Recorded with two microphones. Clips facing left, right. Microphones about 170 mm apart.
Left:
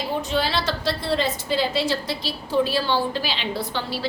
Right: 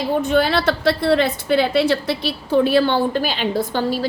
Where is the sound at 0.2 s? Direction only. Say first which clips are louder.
Right 8 dB; 55° right (ahead or behind).